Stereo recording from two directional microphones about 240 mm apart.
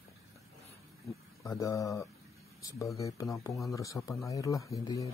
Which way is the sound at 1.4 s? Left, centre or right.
Centre.